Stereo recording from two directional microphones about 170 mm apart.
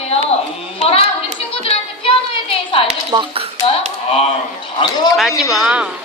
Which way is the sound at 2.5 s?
35° left (ahead or behind).